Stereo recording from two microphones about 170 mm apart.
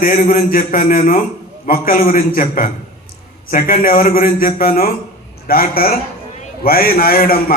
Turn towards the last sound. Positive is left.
turn(degrees=60)  # may be behind; listen again after turning